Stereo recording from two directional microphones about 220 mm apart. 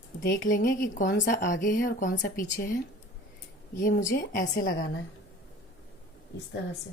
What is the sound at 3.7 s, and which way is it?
A woman's voice, 40° left (ahead or behind).